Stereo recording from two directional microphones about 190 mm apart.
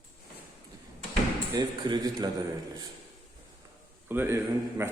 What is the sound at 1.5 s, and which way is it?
Speech, 20° right (ahead or behind).